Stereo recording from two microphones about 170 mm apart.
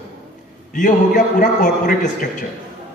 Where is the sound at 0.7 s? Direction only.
50° left (ahead or behind).